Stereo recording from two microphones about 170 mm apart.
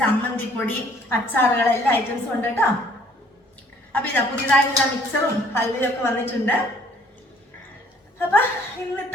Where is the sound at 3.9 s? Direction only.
10° left (ahead or behind).